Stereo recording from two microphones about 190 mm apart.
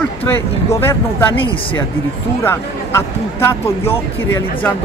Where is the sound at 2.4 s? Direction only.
10° left (ahead or behind).